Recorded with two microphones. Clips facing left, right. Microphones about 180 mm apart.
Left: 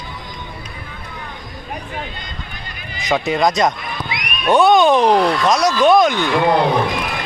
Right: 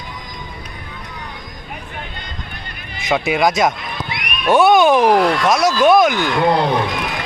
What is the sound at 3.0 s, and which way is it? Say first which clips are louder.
Speech: even; 5° right (ahead or behind).